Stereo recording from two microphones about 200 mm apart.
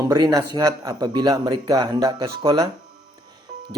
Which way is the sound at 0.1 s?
20° right (ahead or behind).